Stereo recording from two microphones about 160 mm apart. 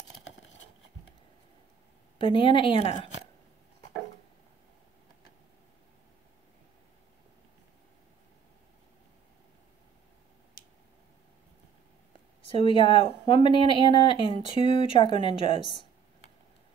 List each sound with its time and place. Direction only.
2.1 s speech: 30° left (ahead or behind)
12.4 s speech: 35° left (ahead or behind)